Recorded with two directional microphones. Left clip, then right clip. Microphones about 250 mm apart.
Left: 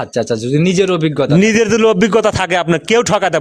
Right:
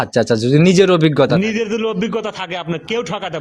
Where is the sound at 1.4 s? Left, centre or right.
Left.